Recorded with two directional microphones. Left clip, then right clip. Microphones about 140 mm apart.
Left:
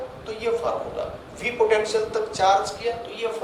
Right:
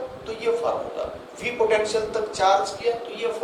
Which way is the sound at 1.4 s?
40° left (ahead or behind).